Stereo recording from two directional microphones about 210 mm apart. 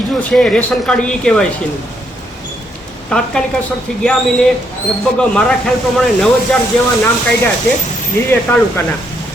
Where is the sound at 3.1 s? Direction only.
5° left (ahead or behind).